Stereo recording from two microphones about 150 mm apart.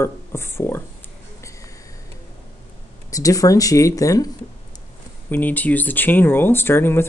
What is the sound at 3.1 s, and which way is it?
Speech, 25° left (ahead or behind).